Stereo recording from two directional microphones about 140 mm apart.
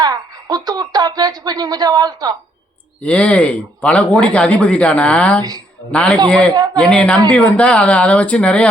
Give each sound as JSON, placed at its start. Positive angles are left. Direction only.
{"t": 0.0, "sound": "speech", "side_deg": -30}
{"t": 3.0, "sound": "speech", "side_deg": 10}
{"t": 6.5, "sound": "speech", "side_deg": -30}
{"t": 6.9, "sound": "speech", "side_deg": 10}